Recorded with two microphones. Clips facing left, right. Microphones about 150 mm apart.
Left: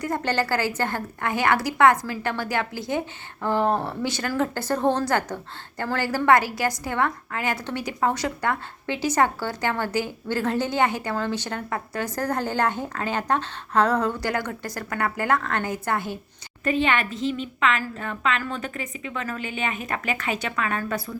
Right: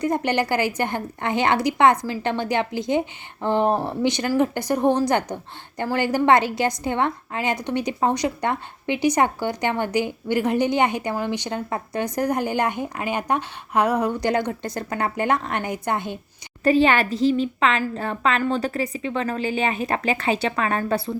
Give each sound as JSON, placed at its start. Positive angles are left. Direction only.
{"t": 0.0, "sound": "a woman's voice", "side_deg": -20}
{"t": 16.6, "sound": "a woman's voice", "side_deg": -35}